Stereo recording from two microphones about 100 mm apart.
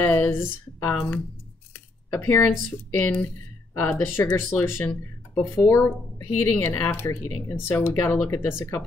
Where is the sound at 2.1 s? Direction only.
20° left (ahead or behind).